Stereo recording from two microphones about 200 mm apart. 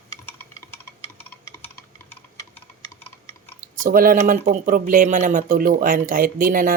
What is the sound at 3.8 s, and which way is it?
Speech, 45° right (ahead or behind).